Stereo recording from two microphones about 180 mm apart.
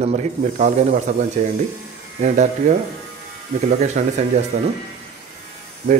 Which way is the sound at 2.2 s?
40° right (ahead or behind).